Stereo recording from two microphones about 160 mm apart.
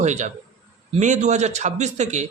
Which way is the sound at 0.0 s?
45° right (ahead or behind).